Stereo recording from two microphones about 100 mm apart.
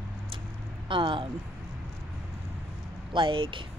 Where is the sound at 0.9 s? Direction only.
55° right (ahead or behind).